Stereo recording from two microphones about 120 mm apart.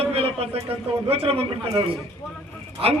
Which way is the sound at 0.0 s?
55° right (ahead or behind).